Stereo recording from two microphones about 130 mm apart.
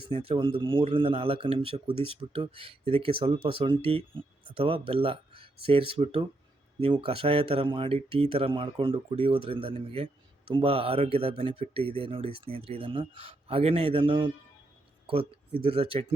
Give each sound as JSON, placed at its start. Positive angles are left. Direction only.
{"t": 0.0, "sound": "speech", "side_deg": -45}